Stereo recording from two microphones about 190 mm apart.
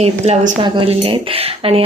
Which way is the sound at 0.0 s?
35° right (ahead or behind).